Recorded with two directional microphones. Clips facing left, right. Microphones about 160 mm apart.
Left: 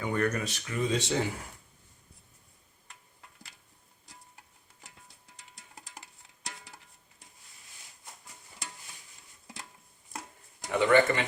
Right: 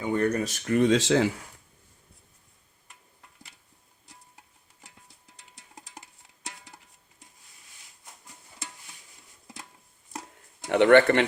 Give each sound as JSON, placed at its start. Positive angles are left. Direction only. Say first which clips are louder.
{"t": 0.0, "sound": "speech", "louder": "right 4 dB", "side_deg": -30}
{"t": 0.8, "sound": "speech", "louder": "right 7 dB", "side_deg": -90}
{"t": 10.7, "sound": "a sound", "louder": "right 6 dB", "side_deg": -70}